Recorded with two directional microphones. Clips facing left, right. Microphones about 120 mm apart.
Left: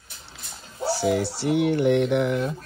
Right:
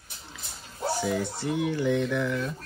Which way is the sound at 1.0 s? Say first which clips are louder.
Left 5 dB; 70° left (ahead or behind).